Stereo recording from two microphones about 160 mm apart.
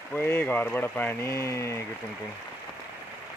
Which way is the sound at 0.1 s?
10° left (ahead or behind).